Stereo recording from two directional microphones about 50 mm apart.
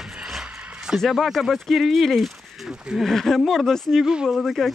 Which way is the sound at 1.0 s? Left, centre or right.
Centre.